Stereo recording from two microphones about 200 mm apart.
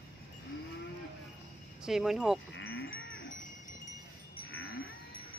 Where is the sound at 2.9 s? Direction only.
70° left (ahead or behind).